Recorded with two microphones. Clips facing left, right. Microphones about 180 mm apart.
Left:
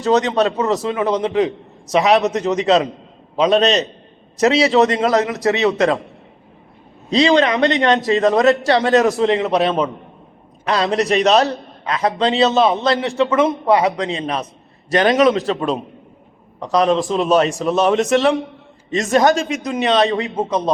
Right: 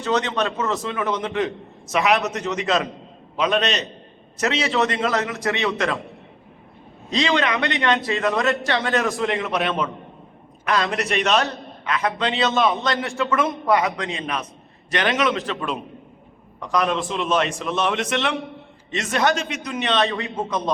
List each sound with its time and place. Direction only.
0.0 s a man's voice: 40° left (ahead or behind)
7.1 s a man's voice: 35° left (ahead or behind)